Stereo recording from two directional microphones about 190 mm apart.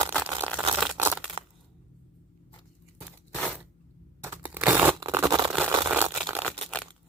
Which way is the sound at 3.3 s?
5° left (ahead or behind).